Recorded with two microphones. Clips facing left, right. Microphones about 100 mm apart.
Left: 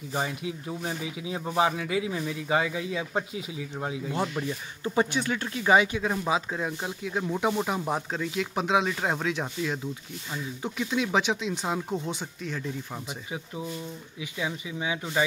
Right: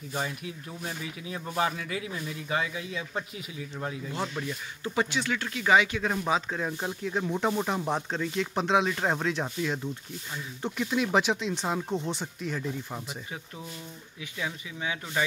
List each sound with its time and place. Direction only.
0.1 s speech: 25° left (ahead or behind)
6.0 s speech: 10° left (ahead or behind)
14.2 s speech: 15° left (ahead or behind)